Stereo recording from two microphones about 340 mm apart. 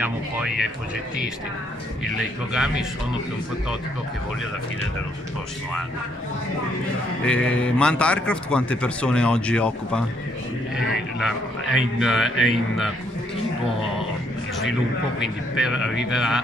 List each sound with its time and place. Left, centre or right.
0.0 s a man's voice: centre
2.1 s a man's voice: centre
7.2 s a man's voice: centre
11.1 s a man's voice: centre
15.1 s a man's voice: centre